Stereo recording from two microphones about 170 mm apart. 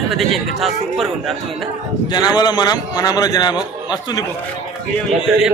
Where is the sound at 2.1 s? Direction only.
25° left (ahead or behind).